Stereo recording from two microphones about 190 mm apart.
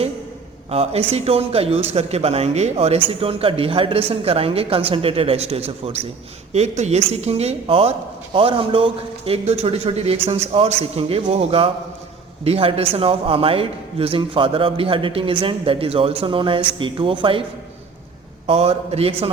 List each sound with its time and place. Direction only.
0.7 s speech: 30° right (ahead or behind)
18.4 s speech: 30° right (ahead or behind)